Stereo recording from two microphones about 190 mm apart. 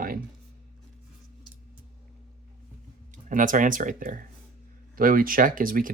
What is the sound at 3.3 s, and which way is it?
Speech, 45° right (ahead or behind).